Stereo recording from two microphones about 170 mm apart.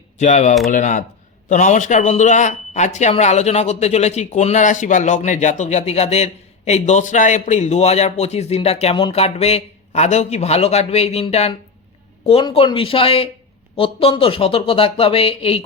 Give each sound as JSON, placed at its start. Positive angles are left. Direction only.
{"t": 0.2, "sound": "a man's voice", "side_deg": 45}